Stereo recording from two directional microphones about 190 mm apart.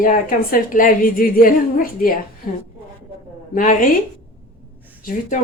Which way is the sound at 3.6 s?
45° left (ahead or behind).